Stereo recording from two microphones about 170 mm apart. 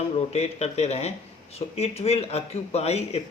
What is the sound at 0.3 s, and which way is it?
Speech, 40° left (ahead or behind).